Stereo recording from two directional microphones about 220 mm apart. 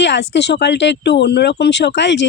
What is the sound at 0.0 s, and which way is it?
Speech, 50° left (ahead or behind).